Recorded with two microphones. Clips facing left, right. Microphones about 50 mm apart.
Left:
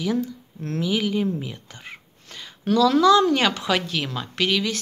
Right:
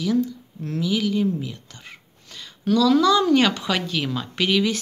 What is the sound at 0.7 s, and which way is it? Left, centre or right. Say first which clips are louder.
A woman's voice: right 1 dB; centre.